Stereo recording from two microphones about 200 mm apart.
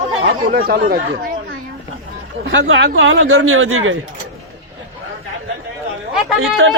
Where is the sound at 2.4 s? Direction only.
70° right (ahead or behind).